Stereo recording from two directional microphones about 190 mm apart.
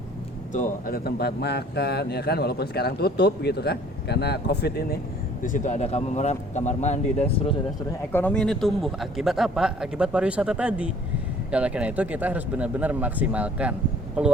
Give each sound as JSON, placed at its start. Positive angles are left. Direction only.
{"t": 0.5, "sound": "a man's voice", "side_deg": 45}
{"t": 5.4, "sound": "speech", "side_deg": 40}
{"t": 8.1, "sound": "speech", "side_deg": 5}